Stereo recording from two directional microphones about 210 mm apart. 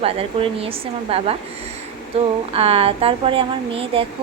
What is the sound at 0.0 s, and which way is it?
Speech, 25° right (ahead or behind).